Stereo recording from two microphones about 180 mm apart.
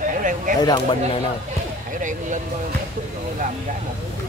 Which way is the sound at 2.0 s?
45° right (ahead or behind).